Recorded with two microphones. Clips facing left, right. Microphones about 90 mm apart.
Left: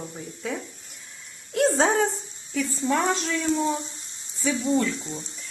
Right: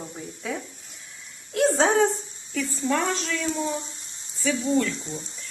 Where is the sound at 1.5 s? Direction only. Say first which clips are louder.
Right 1 dB; centre (ahead or behind).